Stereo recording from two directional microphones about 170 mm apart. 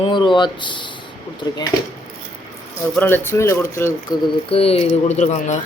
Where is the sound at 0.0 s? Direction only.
30° left (ahead or behind).